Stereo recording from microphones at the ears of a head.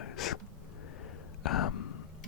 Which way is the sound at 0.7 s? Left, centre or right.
Left.